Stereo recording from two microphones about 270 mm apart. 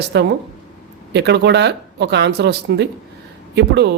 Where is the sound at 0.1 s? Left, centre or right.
Right.